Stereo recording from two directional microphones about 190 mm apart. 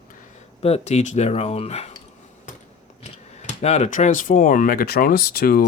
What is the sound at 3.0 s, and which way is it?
Speech, 35° left (ahead or behind).